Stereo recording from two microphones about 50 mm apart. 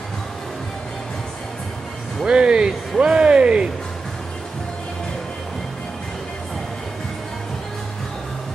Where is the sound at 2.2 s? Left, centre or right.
Centre.